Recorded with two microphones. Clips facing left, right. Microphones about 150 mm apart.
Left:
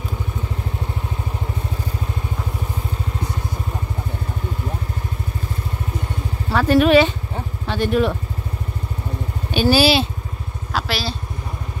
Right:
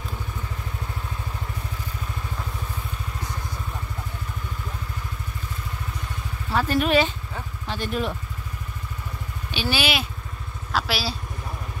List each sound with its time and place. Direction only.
6.5 s speech: 75° left (ahead or behind)
9.5 s speech: 45° left (ahead or behind)
10.7 s speech: centre (ahead or behind)